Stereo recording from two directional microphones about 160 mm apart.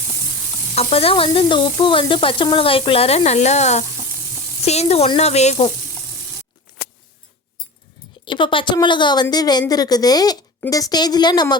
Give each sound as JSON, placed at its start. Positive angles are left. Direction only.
{"t": 0.8, "sound": "sizzle", "side_deg": 40}
{"t": 8.2, "sound": "a woman's voice", "side_deg": 30}